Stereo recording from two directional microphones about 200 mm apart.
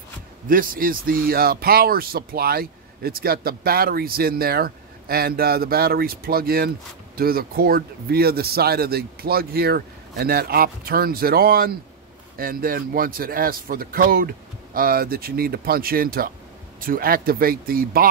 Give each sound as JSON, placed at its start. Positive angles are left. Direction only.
{"t": 0.5, "sound": "speech", "side_deg": -45}